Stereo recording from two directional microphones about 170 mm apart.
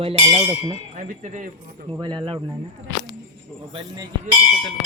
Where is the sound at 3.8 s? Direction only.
25° right (ahead or behind).